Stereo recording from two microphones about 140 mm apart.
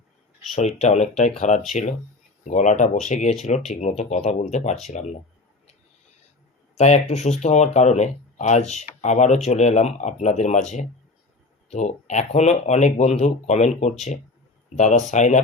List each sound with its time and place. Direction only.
0.5 s speech: 55° left (ahead or behind)
6.7 s speech: 55° left (ahead or behind)